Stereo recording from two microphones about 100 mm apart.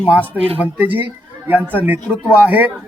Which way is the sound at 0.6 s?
15° right (ahead or behind).